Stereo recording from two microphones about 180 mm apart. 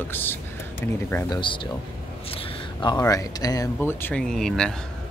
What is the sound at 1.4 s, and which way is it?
Speech, 30° left (ahead or behind).